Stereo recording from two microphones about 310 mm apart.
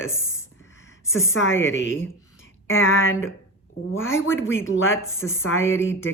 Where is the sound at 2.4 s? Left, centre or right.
Left.